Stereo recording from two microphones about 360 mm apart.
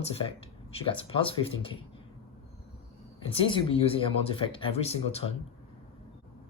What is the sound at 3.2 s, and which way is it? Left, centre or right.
Speech, centre.